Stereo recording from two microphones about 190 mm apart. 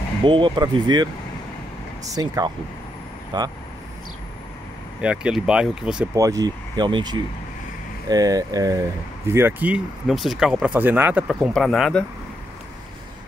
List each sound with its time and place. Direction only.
0.2 s speech: 25° right (ahead or behind)
2.1 s speech: 20° right (ahead or behind)
5.0 s speech: 5° right (ahead or behind)
6.1 s speech: 15° right (ahead or behind); by 12.0 s centre (ahead or behind)